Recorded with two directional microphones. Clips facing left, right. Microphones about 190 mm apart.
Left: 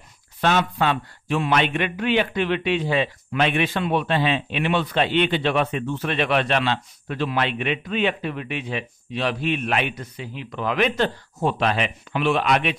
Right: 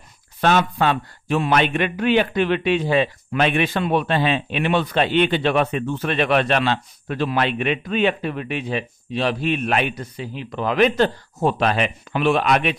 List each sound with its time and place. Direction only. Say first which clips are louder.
0.4 s a man's voice: right 3 dB; 45° right (ahead or behind)